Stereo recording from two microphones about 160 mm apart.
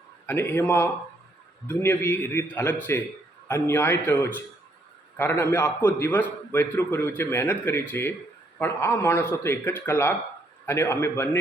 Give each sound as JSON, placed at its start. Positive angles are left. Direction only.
{"t": 0.3, "sound": "a man's voice", "side_deg": 15}